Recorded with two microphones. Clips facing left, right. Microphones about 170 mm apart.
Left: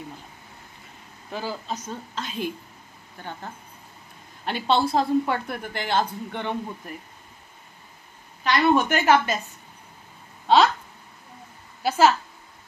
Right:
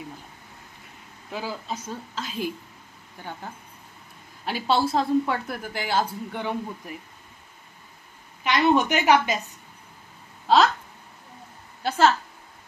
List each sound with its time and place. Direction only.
1.3 s a woman's voice: 5° right (ahead or behind)
8.4 s a woman's voice: 20° right (ahead or behind)
10.4 s a sound: centre (ahead or behind)
11.8 s a woman's voice: 10° left (ahead or behind)